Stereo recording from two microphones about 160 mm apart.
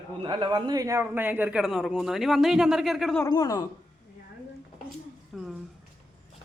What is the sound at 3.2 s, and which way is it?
Speech, 20° left (ahead or behind).